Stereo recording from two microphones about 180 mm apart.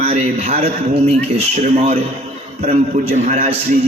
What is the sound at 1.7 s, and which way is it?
A man's voice, 35° right (ahead or behind).